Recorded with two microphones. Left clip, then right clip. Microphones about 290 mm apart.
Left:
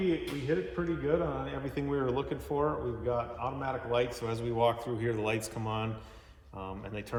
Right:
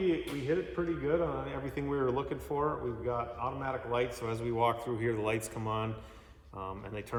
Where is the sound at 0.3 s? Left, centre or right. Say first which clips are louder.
Even; centre.